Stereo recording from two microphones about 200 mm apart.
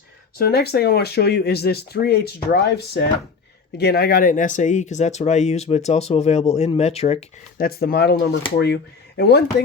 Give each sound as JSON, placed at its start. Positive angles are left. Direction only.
{"t": 0.3, "sound": "speech", "side_deg": 50}
{"t": 7.6, "sound": "speech", "side_deg": 50}